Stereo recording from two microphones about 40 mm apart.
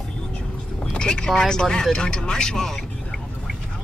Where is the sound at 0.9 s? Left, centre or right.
Left.